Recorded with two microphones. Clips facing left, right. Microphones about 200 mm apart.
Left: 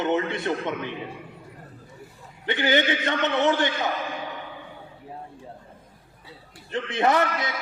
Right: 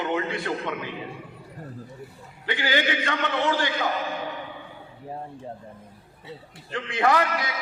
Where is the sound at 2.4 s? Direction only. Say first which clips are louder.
Left 3 dB; 20° left (ahead or behind).